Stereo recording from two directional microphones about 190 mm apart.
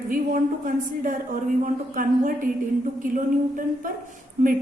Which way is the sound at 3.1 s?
45° right (ahead or behind).